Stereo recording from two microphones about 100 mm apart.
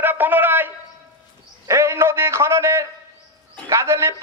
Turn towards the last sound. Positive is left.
turn(degrees=-25)  # may be behind; listen again after turning